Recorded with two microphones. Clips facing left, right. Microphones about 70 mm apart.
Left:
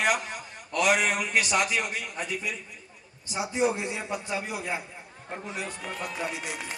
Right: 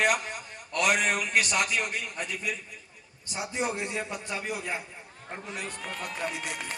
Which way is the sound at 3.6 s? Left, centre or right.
Right.